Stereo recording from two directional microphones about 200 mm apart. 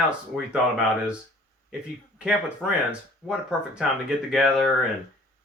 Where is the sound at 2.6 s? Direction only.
5° right (ahead or behind).